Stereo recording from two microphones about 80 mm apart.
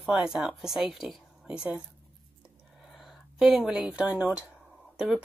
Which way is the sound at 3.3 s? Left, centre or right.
Centre.